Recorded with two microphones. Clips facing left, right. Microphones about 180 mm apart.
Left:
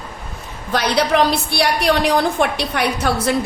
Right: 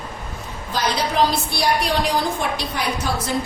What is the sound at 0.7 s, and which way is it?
A woman's voice, 70° left (ahead or behind).